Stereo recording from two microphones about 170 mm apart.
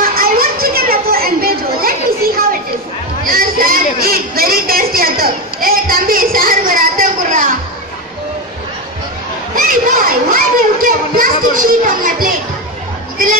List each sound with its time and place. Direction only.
0.0 s chatter: 60° right (ahead or behind)
3.3 s a sound: 55° right (ahead or behind)
9.6 s children playing: 55° right (ahead or behind)
11.5 s music: 55° right (ahead or behind)